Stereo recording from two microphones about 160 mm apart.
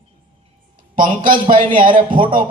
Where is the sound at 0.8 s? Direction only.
55° right (ahead or behind).